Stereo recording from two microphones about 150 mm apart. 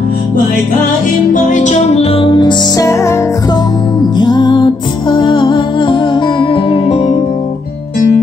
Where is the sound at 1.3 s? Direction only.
55° left (ahead or behind).